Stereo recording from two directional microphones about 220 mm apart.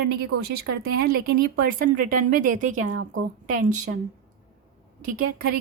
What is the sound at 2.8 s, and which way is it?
Speech, 75° right (ahead or behind).